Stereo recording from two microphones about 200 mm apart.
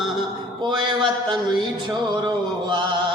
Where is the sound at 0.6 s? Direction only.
25° right (ahead or behind).